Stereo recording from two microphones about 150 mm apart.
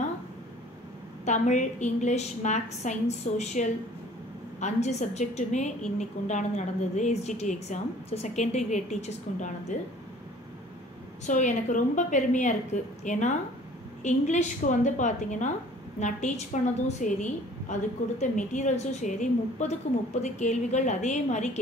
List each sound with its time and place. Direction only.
1.2 s a woman's voice: 55° left (ahead or behind)
11.2 s a woman's voice: 55° left (ahead or behind)